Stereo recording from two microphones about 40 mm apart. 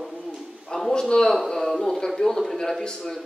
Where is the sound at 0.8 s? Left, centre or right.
Centre.